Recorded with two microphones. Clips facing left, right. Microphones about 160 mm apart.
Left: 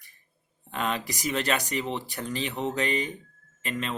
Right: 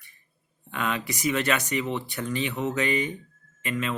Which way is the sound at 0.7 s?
35° left (ahead or behind).